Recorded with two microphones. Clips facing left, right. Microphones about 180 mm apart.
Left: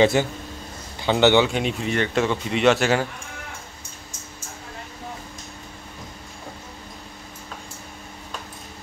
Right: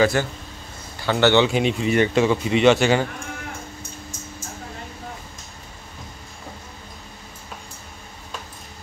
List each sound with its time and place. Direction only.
0.0 s a man's voice: 20° left (ahead or behind)
1.4 s a man's voice: centre (ahead or behind)